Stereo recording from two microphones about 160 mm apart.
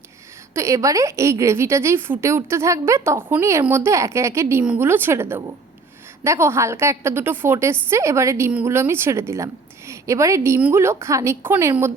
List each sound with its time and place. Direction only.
0.5 s a woman's voice: 20° right (ahead or behind)